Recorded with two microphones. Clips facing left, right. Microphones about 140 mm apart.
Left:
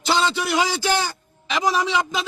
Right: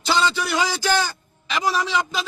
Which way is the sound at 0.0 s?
25° left (ahead or behind).